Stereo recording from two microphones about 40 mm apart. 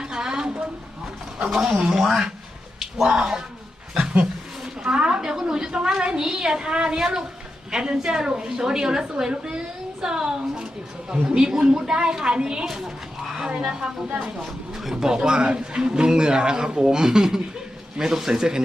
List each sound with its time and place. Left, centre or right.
0.0 s a sound: centre
1.5 s speech: centre
4.2 s a sound: centre
4.9 s a woman's voice: right
12.6 s speech: centre
13.5 s a woman's voice: right
15.1 s a woman's voice: right